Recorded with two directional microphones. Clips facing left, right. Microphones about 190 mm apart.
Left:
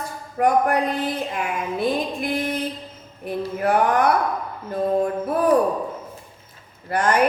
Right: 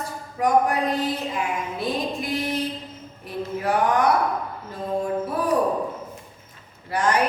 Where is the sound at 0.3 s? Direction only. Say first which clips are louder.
Left 2 dB; 55° left (ahead or behind).